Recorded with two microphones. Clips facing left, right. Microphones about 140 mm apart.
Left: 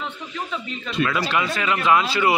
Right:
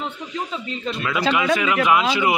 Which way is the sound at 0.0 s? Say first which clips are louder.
Right 2 dB; 35° right (ahead or behind).